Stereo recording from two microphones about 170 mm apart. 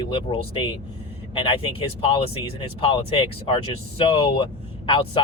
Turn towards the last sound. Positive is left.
turn(degrees=30)  # may be behind; listen again after turning